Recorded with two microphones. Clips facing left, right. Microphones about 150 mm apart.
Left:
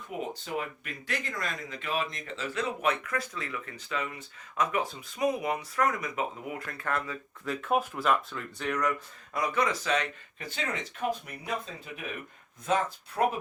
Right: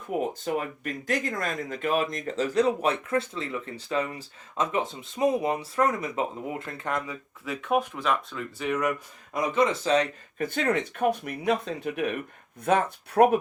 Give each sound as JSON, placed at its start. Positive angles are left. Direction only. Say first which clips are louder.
{"t": 0.1, "sound": "speech", "louder": "right 6 dB", "side_deg": -45}
{"t": 7.4, "sound": "speech", "louder": "right 2 dB", "side_deg": 0}
{"t": 9.3, "sound": "speech", "louder": "right 5 dB", "side_deg": -20}
{"t": 10.3, "sound": "speech", "louder": "right 11 dB", "side_deg": -50}
{"t": 12.6, "sound": "speech", "louder": "right 4 dB", "side_deg": -60}